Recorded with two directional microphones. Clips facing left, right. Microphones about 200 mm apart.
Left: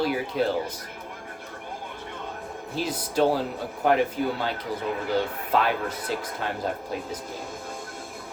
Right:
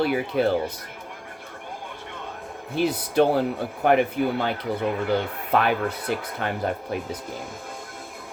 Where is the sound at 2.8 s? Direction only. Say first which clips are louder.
Right 4 dB; 60° right (ahead or behind).